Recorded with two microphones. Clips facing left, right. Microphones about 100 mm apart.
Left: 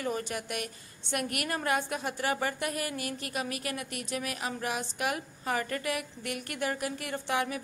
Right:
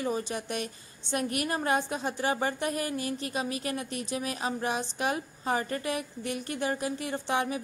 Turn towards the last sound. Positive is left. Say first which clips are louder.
# right 2 dB
turn(degrees=-25)  # may be behind; listen again after turning